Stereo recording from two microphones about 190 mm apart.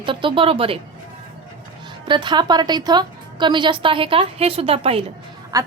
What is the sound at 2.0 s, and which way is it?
A woman's voice, 25° right (ahead or behind).